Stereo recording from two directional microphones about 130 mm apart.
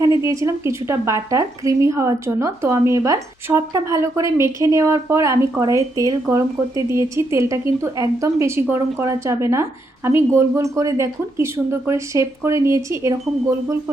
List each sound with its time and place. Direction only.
0.3 s speech: 25° right (ahead or behind)